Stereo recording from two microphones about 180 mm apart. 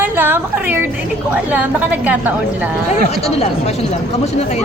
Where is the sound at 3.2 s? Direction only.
35° left (ahead or behind).